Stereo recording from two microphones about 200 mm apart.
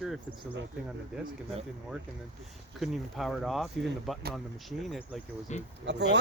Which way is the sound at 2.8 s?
Centre (ahead or behind).